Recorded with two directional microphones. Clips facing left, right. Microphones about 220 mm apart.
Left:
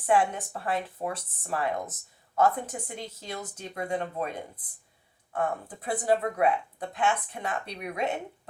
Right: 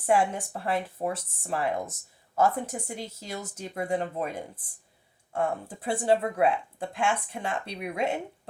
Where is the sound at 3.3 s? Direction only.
25° right (ahead or behind).